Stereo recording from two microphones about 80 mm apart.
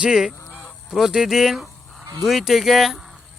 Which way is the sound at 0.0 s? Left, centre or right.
Centre.